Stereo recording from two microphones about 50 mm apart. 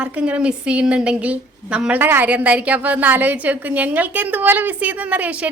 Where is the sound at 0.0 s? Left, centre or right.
Right.